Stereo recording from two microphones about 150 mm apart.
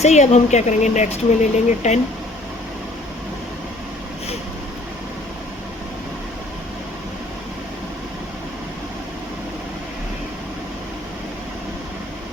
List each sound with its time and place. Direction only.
0.0 s speech: 50° left (ahead or behind)